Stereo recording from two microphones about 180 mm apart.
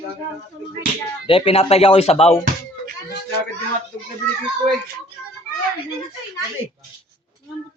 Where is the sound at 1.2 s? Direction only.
30° left (ahead or behind).